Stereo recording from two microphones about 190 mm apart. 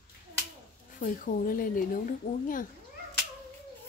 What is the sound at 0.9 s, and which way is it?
Speech, 45° left (ahead or behind).